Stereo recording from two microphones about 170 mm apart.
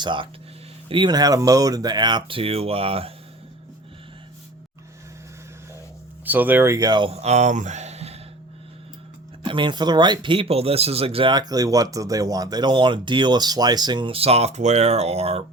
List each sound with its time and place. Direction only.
0.0 s speech: 30° right (ahead or behind)
6.2 s speech: 10° right (ahead or behind); by 8.2 s 40° right (ahead or behind)
9.4 s speech: 25° right (ahead or behind)